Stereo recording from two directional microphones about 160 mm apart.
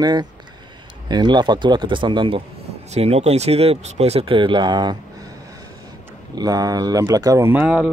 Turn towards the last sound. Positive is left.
turn(degrees=-5)  # may be behind; listen again after turning